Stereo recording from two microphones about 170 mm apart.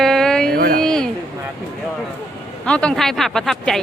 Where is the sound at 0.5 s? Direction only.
60° right (ahead or behind).